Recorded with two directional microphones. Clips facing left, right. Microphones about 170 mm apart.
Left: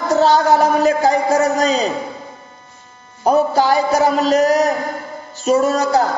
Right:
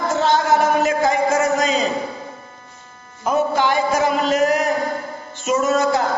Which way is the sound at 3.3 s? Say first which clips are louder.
Left 4 dB; 35° left (ahead or behind).